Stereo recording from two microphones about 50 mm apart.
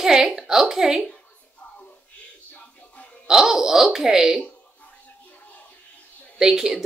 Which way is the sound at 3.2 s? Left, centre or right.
Centre.